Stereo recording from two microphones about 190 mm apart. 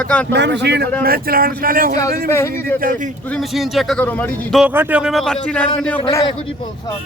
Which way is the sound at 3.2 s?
Centre (ahead or behind).